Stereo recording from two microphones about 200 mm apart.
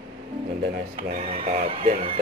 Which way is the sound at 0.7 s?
50° right (ahead or behind).